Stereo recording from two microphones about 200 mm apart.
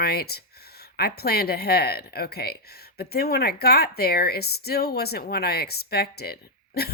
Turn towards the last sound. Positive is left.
turn(degrees=50)  # may be behind; listen again after turning